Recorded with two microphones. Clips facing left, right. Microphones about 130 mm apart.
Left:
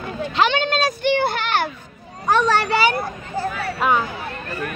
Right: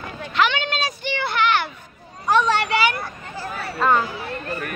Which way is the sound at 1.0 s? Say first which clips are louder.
Right 1 dB; 50° left (ahead or behind).